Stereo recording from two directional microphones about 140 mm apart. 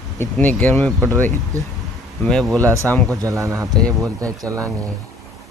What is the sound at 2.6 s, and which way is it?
Speech, 20° right (ahead or behind).